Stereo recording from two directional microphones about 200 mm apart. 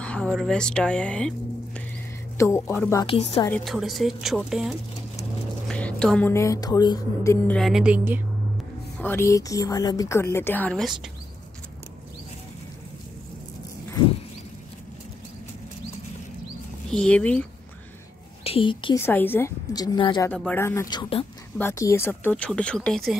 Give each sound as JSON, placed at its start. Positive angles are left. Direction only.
{"t": 0.0, "sound": "speech", "side_deg": 5}
{"t": 3.1, "sound": "a woman's voice", "side_deg": 30}
{"t": 3.4, "sound": "speech", "side_deg": 5}
{"t": 7.4, "sound": "speech", "side_deg": 0}
{"t": 9.0, "sound": "speech", "side_deg": 10}
{"t": 16.9, "sound": "speech", "side_deg": 5}
{"t": 18.4, "sound": "speech", "side_deg": 25}
{"t": 18.9, "sound": "speech", "side_deg": 10}
{"t": 20.2, "sound": "speech", "side_deg": 10}
{"t": 21.5, "sound": "speech", "side_deg": 15}